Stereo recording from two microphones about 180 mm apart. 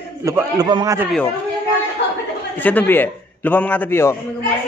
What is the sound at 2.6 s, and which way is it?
A man's voice, 10° left (ahead or behind).